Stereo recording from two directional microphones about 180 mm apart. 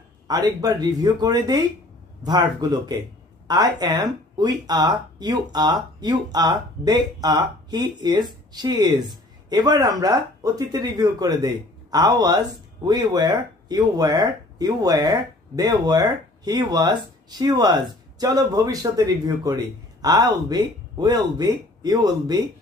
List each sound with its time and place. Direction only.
0.3 s speech: 20° right (ahead or behind)